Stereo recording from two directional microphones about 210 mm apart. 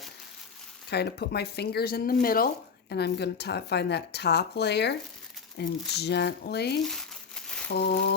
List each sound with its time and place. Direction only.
0.9 s speech: 50° left (ahead or behind)